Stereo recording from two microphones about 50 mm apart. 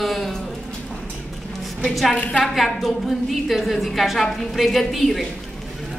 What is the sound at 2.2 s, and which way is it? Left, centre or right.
Speech, left.